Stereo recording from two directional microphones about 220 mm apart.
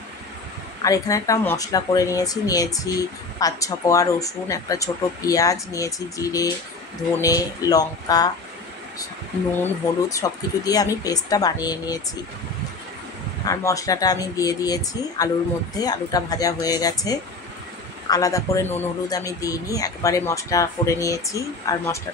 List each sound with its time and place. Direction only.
0.8 s speech: 15° left (ahead or behind)
10.0 s speech: 15° left (ahead or behind)
13.5 s speech: 15° left (ahead or behind)